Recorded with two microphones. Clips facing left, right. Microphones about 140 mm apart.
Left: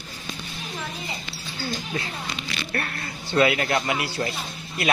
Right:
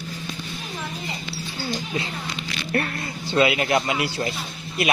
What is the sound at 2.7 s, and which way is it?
Speech, 20° right (ahead or behind).